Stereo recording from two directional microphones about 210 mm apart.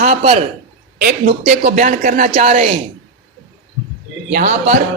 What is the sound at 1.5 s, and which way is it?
Speech, 40° right (ahead or behind).